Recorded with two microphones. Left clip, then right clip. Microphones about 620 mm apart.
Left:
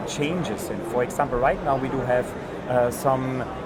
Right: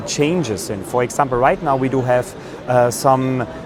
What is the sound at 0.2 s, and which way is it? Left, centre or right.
Speech, right.